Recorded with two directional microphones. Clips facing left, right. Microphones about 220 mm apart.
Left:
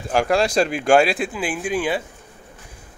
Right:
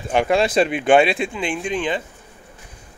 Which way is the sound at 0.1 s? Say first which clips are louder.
Right 1 dB; centre (ahead or behind).